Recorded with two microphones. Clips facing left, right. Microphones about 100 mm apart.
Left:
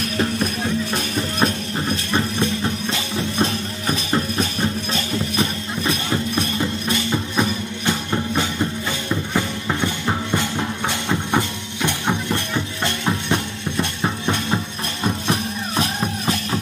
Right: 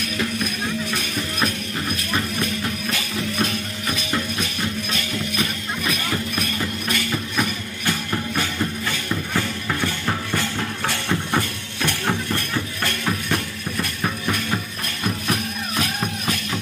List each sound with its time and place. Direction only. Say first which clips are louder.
0.0 s music: left 4 dB; 35° left (ahead or behind)